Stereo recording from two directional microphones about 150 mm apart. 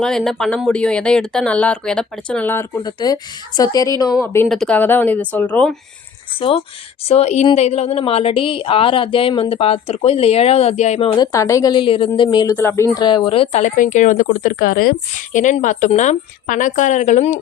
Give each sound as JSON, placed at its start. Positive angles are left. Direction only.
{"t": 0.0, "sound": "speech", "side_deg": 0}
{"t": 2.7, "sound": "speech", "side_deg": 25}
{"t": 4.4, "sound": "speech", "side_deg": 5}
{"t": 7.1, "sound": "a woman's voice", "side_deg": 45}
{"t": 11.2, "sound": "speech", "side_deg": 20}
{"t": 12.5, "sound": "a woman's voice", "side_deg": 15}